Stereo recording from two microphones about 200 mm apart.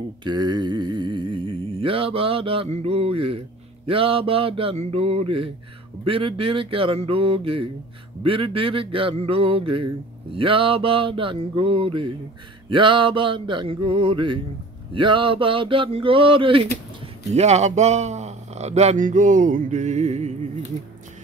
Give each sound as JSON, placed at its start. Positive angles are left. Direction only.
{"t": 0.2, "sound": "mantra", "side_deg": -20}
{"t": 3.8, "sound": "a sound", "side_deg": -25}
{"t": 17.3, "sound": "a man's voice", "side_deg": -35}